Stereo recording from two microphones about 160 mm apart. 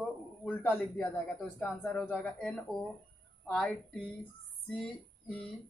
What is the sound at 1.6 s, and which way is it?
A woman's voice, 10° left (ahead or behind).